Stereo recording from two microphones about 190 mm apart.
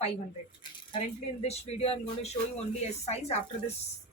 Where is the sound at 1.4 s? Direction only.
35° left (ahead or behind).